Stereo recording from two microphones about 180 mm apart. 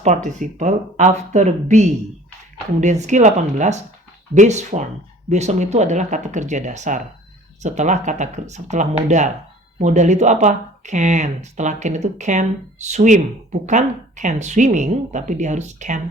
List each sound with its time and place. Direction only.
0.0 s speech: 45° right (ahead or behind)